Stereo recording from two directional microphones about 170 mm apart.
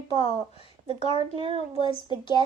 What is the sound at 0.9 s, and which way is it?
Speech, 30° right (ahead or behind).